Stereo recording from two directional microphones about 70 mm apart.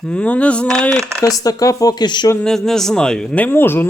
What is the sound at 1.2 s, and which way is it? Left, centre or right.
Speech, left.